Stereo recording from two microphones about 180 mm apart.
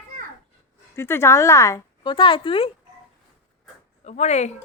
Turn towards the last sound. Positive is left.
turn(degrees=40)  # may be behind; listen again after turning